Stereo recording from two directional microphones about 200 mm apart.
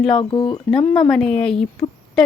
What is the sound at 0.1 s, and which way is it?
Speech, 25° left (ahead or behind).